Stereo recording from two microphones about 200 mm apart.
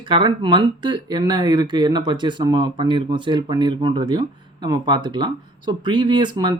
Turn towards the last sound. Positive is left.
turn(degrees=-20)  # may be behind; listen again after turning